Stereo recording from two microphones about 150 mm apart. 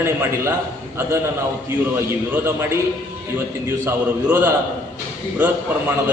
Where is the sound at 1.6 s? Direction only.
15° right (ahead or behind).